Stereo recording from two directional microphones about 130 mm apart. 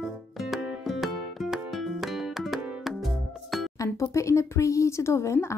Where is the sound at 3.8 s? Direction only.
20° left (ahead or behind).